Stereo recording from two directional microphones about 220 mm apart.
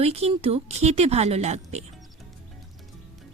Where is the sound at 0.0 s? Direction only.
25° right (ahead or behind).